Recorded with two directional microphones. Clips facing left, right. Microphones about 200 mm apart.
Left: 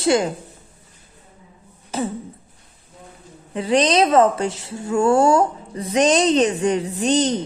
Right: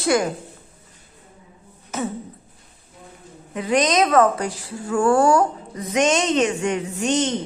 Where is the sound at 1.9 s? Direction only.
30° left (ahead or behind).